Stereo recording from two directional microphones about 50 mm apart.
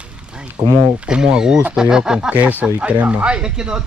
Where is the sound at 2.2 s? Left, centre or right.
Right.